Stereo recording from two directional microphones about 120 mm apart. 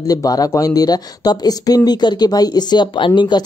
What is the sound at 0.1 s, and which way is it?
Speech, 30° left (ahead or behind).